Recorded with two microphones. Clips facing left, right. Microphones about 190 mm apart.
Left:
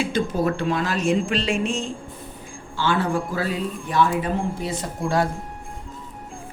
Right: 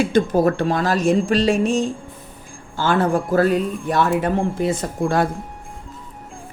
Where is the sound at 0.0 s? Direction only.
45° right (ahead or behind).